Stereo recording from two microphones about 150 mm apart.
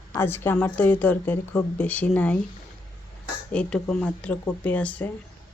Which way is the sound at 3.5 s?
5° left (ahead or behind).